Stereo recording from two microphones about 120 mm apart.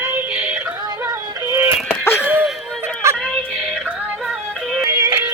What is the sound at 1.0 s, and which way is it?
Music, 20° right (ahead or behind).